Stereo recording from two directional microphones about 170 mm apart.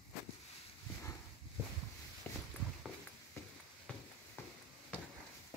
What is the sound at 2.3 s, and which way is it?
Walk, 10° left (ahead or behind).